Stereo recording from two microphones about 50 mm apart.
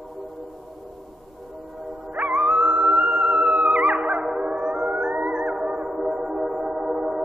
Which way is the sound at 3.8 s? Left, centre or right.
Right.